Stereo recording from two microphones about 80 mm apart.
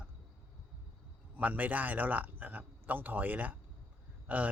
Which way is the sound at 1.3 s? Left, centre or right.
Centre.